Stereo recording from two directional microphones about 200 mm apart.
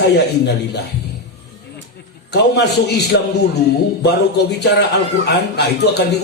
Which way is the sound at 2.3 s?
55° left (ahead or behind).